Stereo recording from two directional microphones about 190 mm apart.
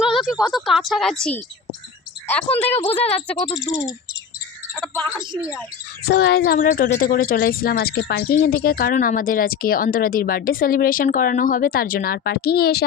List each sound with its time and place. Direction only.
0.0 s a woman's voice: centre (ahead or behind)
2.2 s speech: 10° left (ahead or behind)
3.3 s speech: 20° left (ahead or behind)
5.4 s speech: 5° right (ahead or behind)
6.1 s speech: 55° left (ahead or behind)